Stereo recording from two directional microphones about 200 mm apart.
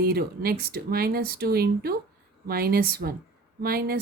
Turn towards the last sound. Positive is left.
turn(degrees=-45)  # may be behind; listen again after turning